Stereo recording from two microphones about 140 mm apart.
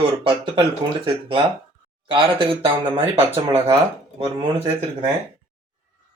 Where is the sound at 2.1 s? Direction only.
35° right (ahead or behind).